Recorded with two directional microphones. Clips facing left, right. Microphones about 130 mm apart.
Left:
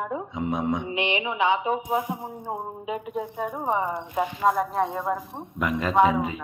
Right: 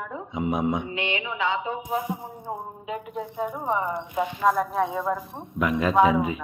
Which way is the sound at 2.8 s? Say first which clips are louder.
Left 2 dB; 20° left (ahead or behind).